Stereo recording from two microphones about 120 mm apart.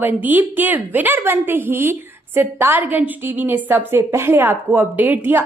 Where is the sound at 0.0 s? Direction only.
15° right (ahead or behind).